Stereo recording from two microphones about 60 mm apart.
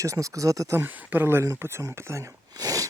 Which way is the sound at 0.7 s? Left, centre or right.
Right.